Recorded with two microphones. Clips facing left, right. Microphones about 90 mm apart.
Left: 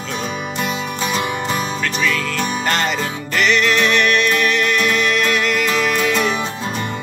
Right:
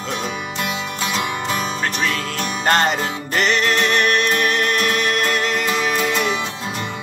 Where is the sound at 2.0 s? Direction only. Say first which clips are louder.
Left 3 dB; 40° right (ahead or behind).